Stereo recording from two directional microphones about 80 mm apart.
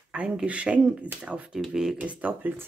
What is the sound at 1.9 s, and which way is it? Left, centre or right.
Speech, centre.